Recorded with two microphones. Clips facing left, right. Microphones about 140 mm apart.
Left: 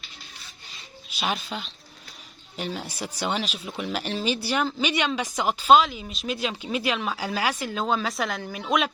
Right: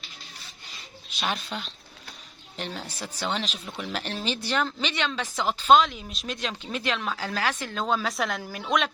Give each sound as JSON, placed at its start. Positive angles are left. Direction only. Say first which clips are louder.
{"t": 1.2, "sound": "speech", "louder": "left 2 dB", "side_deg": 0}